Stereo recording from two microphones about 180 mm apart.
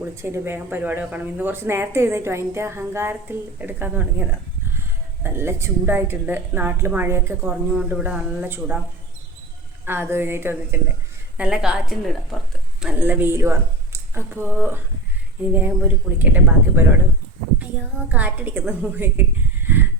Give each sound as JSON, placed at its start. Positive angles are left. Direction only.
{"t": 0.0, "sound": "speech", "side_deg": -15}
{"t": 9.8, "sound": "a woman's voice", "side_deg": -10}
{"t": 18.1, "sound": "speech", "side_deg": -10}
{"t": 19.6, "sound": "a sound", "side_deg": -10}